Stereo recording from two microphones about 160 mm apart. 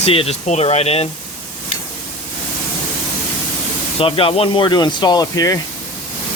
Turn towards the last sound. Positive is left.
turn(degrees=25)  # may be behind; listen again after turning